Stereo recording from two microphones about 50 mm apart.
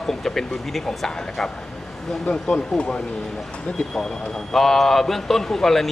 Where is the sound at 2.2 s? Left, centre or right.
Left.